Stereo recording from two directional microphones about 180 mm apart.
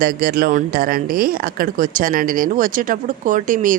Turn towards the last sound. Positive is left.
turn(degrees=-45)  # may be behind; listen again after turning